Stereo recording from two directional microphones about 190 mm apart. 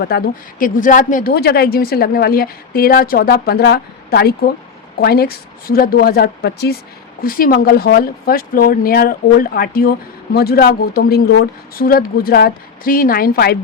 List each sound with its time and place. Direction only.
0.1 s speech: 55° left (ahead or behind)
0.6 s a woman's voice: 45° left (ahead or behind)